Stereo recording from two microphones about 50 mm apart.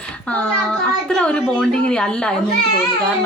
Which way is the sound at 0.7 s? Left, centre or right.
Centre.